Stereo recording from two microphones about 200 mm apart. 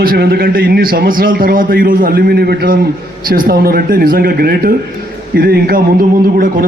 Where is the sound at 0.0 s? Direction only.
50° right (ahead or behind).